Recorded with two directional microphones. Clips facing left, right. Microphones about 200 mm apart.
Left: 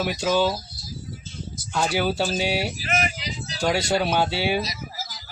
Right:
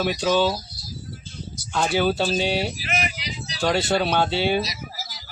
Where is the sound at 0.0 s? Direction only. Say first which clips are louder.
Right 1 dB; 10° left (ahead or behind).